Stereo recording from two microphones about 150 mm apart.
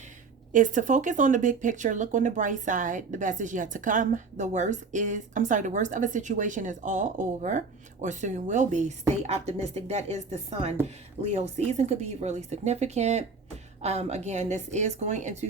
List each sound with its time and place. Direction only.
0.5 s a woman's voice: 60° right (ahead or behind)